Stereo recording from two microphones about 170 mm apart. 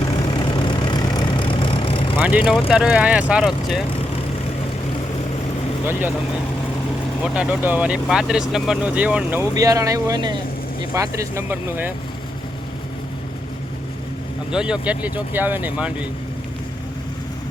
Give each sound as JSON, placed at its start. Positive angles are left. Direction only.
{"t": 0.6, "sound": "vehicle", "side_deg": 25}
{"t": 2.2, "sound": "speech", "side_deg": -10}
{"t": 5.8, "sound": "speech", "side_deg": -10}
{"t": 7.3, "sound": "speech", "side_deg": -10}
{"t": 14.5, "sound": "speech", "side_deg": -5}